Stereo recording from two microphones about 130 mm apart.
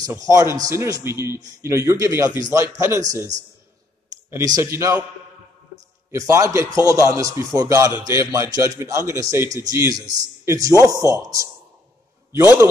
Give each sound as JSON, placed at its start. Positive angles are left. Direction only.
{"t": 0.0, "sound": "a man's voice", "side_deg": -25}
{"t": 4.6, "sound": "a man's voice", "side_deg": -20}
{"t": 6.1, "sound": "a man's voice", "side_deg": -25}